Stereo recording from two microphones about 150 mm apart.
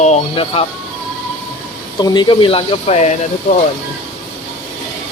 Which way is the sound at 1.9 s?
30° left (ahead or behind).